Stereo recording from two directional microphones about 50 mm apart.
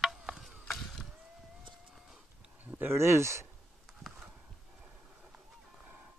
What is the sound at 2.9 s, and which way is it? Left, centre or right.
Speech, right.